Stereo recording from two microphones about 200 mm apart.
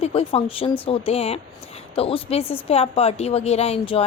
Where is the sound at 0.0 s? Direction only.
30° left (ahead or behind).